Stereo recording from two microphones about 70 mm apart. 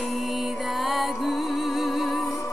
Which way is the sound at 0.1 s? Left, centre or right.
Centre.